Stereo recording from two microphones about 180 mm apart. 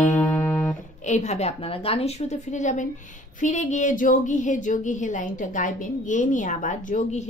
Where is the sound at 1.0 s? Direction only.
40° left (ahead or behind).